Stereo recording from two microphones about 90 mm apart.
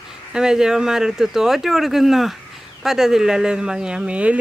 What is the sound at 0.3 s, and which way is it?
Speech, 5° right (ahead or behind).